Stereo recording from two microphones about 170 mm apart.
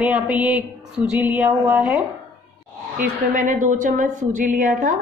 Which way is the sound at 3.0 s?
50° right (ahead or behind).